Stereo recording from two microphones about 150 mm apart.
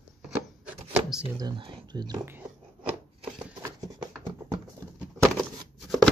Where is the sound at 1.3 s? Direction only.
30° right (ahead or behind).